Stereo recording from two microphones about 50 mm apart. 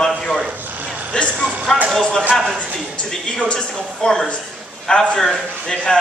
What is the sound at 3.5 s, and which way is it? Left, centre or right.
A man's voice, centre.